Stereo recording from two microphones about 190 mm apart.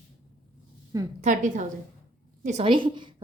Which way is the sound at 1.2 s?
40° right (ahead or behind).